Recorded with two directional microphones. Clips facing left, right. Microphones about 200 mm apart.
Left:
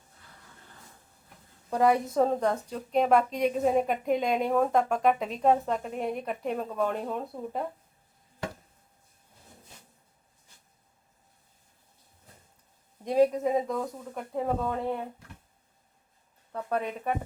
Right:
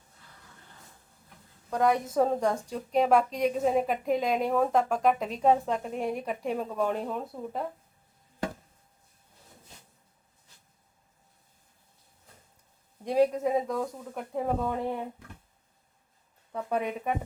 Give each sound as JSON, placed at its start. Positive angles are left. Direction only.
{"t": 1.7, "sound": "a woman's voice", "side_deg": 5}
{"t": 13.2, "sound": "a woman's voice", "side_deg": 0}
{"t": 16.5, "sound": "speech", "side_deg": -5}